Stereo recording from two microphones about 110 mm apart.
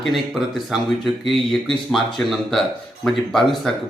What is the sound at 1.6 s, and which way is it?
A man's voice, centre (ahead or behind).